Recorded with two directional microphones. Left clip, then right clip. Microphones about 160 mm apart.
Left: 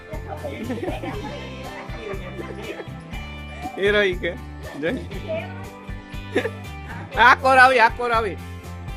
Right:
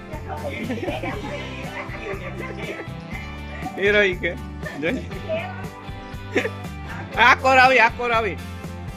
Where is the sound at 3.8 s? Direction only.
10° left (ahead or behind).